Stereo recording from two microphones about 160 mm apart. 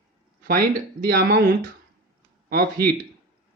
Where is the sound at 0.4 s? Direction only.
65° right (ahead or behind).